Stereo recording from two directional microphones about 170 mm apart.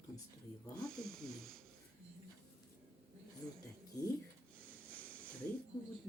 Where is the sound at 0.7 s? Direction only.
5° left (ahead or behind).